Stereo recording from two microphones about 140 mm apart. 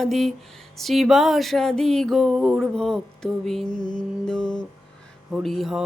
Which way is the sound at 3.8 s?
30° left (ahead or behind).